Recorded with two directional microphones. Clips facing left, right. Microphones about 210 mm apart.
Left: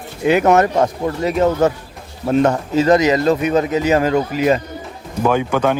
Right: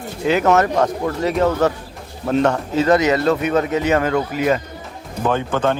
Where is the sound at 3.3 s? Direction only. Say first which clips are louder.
Left 2 dB; 30° left (ahead or behind).